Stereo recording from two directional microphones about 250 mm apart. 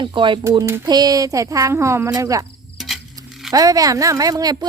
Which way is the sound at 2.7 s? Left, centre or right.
Centre.